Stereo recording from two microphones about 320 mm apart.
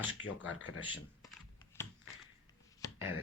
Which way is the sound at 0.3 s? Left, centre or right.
Left.